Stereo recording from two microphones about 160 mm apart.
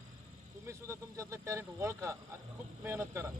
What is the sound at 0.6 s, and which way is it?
Speech, 15° right (ahead or behind).